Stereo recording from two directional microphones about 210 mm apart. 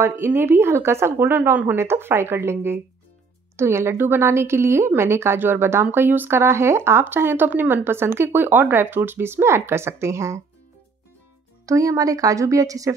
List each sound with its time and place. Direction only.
0.0 s a woman's voice: 10° right (ahead or behind)
11.6 s a woman's voice: 15° right (ahead or behind)